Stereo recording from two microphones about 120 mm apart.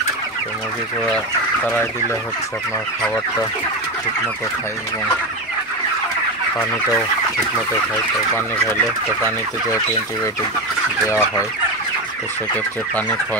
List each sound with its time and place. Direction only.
11.1 s chicken: 25° left (ahead or behind)